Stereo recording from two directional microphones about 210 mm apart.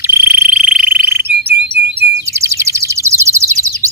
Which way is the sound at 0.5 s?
10° right (ahead or behind).